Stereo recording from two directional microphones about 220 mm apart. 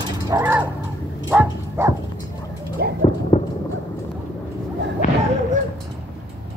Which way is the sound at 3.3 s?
20° left (ahead or behind).